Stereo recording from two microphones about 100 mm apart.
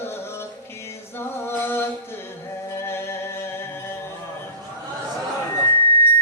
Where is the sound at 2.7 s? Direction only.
25° left (ahead or behind).